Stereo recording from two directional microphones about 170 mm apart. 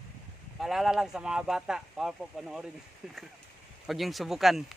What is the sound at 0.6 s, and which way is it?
Speech, centre (ahead or behind).